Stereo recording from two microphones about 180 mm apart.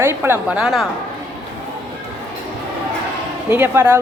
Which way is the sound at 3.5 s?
10° right (ahead or behind).